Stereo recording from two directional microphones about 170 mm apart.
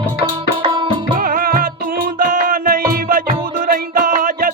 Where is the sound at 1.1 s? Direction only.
55° right (ahead or behind).